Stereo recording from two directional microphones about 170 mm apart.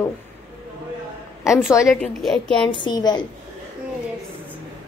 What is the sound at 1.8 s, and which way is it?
Speech, centre (ahead or behind).